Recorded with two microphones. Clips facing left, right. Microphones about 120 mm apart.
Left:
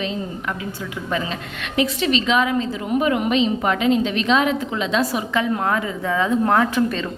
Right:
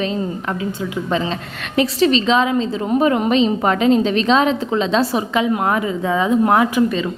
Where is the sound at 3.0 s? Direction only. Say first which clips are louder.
Right 3 dB; 35° right (ahead or behind).